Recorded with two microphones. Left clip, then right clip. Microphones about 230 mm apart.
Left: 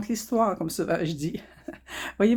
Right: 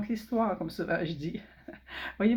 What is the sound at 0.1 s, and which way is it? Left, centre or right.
Speech, left.